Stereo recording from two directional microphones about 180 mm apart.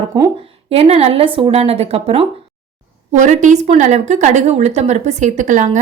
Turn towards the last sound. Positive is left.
turn(degrees=-45)  # may be behind; listen again after turning